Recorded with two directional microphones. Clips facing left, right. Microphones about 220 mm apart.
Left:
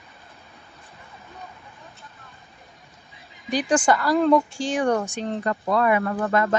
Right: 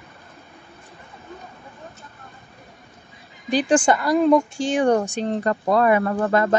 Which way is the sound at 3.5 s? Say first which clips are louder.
Right 3 dB; 30° right (ahead or behind).